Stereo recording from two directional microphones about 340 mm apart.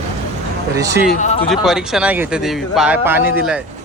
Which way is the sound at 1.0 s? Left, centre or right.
Left.